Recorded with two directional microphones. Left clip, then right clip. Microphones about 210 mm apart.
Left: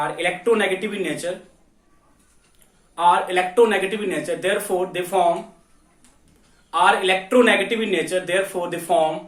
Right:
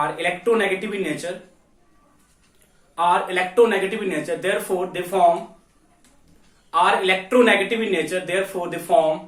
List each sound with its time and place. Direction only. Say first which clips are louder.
0.0 s speech: even; 20° left (ahead or behind)
2.9 s speech: left 2 dB; 15° left (ahead or behind)
6.7 s speech: left 1 dB; 20° left (ahead or behind)